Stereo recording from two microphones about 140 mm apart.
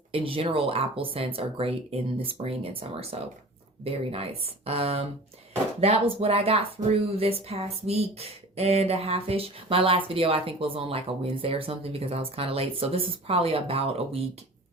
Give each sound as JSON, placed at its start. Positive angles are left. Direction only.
{"t": 0.1, "sound": "speech", "side_deg": -40}